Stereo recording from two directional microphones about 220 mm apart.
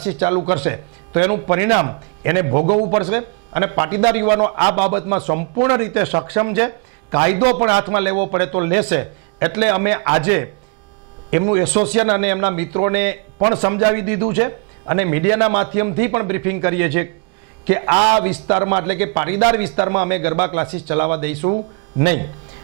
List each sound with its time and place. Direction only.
0.0 s a man's voice: 25° right (ahead or behind)
2.5 s a man's voice: 30° right (ahead or behind)
5.6 s a man's voice: 20° right (ahead or behind)
8.1 s a man's voice: 25° right (ahead or behind)
13.4 s a man's voice: 25° right (ahead or behind)
19.8 s a man's voice: 25° right (ahead or behind)